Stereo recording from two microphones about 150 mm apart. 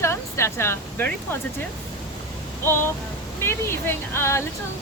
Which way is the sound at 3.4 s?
15° left (ahead or behind).